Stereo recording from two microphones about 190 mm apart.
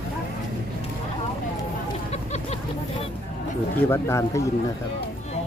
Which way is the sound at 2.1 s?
35° left (ahead or behind).